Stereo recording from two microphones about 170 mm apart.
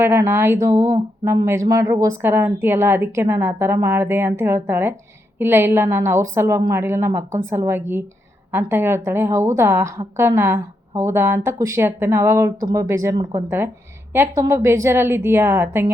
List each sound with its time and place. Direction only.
0.0 s a woman's voice: 15° right (ahead or behind)